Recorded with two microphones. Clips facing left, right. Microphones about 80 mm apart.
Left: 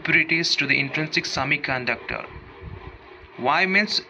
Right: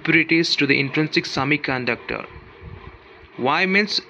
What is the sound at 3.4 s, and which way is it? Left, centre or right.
Speech, left.